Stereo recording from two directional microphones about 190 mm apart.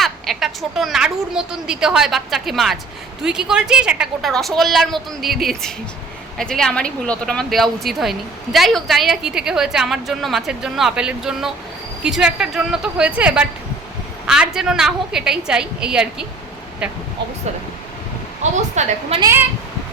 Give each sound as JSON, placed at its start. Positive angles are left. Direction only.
{"t": 0.0, "sound": "a woman's voice", "side_deg": 0}
{"t": 18.5, "sound": "a woman's voice", "side_deg": -40}
{"t": 19.2, "sound": "speech", "side_deg": -10}